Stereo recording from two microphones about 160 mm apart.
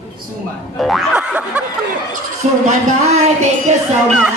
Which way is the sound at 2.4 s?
45° right (ahead or behind).